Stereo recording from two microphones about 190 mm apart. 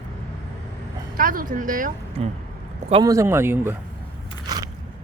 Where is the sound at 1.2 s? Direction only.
45° right (ahead or behind).